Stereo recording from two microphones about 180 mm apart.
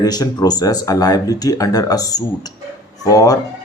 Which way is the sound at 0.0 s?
20° left (ahead or behind).